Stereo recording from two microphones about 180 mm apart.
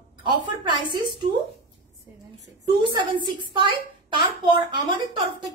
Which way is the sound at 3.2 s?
25° right (ahead or behind).